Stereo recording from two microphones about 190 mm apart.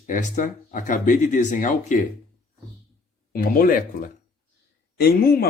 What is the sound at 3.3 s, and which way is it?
Speech, 50° left (ahead or behind).